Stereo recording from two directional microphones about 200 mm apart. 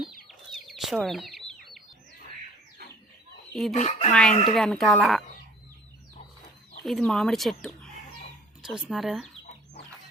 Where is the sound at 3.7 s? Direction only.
35° left (ahead or behind).